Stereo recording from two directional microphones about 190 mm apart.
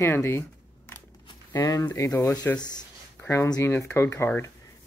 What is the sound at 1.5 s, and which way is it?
Speech, 15° left (ahead or behind).